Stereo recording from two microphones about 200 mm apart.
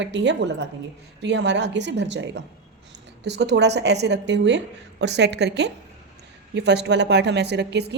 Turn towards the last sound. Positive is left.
turn(degrees=-60)  # may be behind; listen again after turning